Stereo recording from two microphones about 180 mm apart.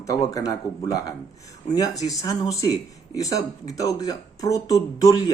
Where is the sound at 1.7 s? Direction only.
20° left (ahead or behind).